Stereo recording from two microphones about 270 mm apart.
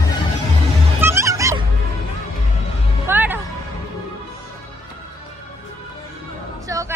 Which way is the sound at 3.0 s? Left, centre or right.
Centre.